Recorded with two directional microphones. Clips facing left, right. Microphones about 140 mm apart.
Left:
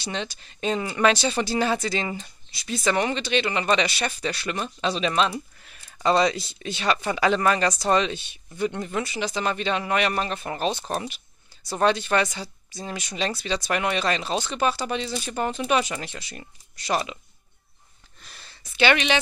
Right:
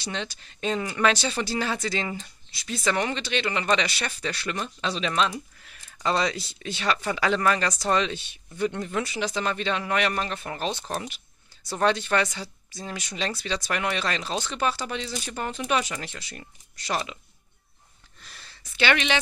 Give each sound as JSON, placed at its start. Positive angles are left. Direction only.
{"t": 0.0, "sound": "speech", "side_deg": 15}
{"t": 16.9, "sound": "speech", "side_deg": 25}
{"t": 18.2, "sound": "a sound", "side_deg": 20}